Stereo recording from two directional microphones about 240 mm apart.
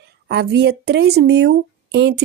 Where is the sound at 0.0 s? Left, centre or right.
Right.